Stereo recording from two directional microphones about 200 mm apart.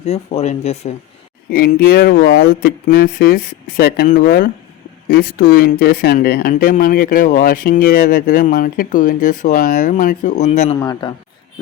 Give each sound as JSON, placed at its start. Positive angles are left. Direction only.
{"t": 0.0, "sound": "speech", "side_deg": 35}
{"t": 1.5, "sound": "speech", "side_deg": 50}
{"t": 10.8, "sound": "speech", "side_deg": 20}